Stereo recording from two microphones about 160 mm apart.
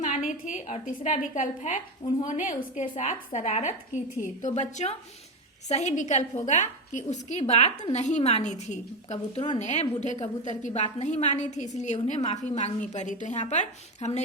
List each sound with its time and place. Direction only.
0.0 s a woman's voice: 45° left (ahead or behind)